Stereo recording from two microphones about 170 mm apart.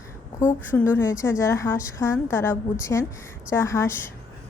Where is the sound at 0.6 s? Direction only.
10° left (ahead or behind).